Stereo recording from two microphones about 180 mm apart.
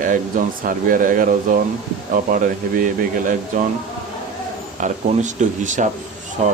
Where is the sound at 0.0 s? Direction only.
45° right (ahead or behind).